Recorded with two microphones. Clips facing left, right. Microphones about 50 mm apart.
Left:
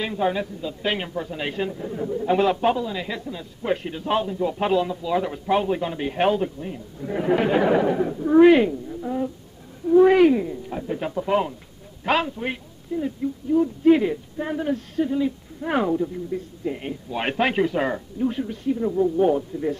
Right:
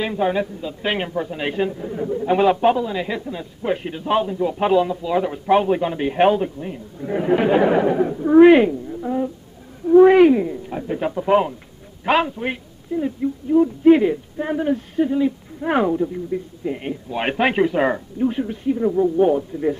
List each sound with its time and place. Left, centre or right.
0.0 s a woman's voice: centre